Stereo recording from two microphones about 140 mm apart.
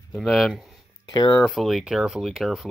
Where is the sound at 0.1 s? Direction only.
Centre (ahead or behind).